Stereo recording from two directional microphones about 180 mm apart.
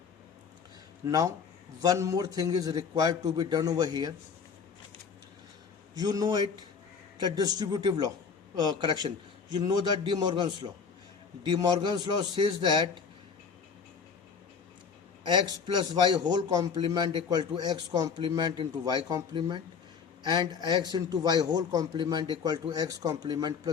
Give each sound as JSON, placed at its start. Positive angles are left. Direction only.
{"t": 1.0, "sound": "a man's voice", "side_deg": -20}
{"t": 5.9, "sound": "a man's voice", "side_deg": -20}
{"t": 15.2, "sound": "a man's voice", "side_deg": -25}